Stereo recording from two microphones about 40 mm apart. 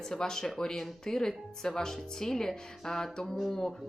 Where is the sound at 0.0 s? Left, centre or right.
Centre.